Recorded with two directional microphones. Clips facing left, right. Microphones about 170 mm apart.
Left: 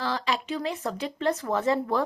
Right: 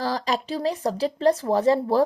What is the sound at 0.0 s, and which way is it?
A woman's voice, 40° right (ahead or behind).